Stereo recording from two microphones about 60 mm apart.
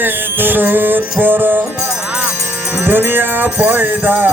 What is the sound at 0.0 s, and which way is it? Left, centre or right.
Music, right.